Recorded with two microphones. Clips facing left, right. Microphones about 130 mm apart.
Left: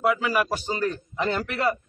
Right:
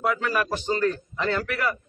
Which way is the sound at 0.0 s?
5° left (ahead or behind).